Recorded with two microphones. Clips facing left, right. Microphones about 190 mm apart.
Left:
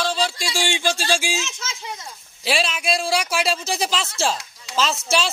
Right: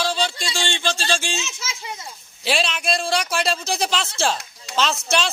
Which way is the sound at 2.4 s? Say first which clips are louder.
Even; centre (ahead or behind).